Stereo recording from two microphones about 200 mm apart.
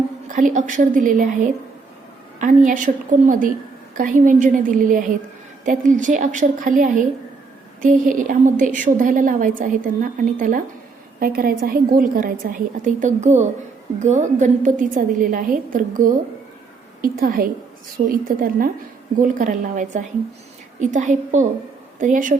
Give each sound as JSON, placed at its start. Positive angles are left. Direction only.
{"t": 0.3, "sound": "a woman's voice", "side_deg": -40}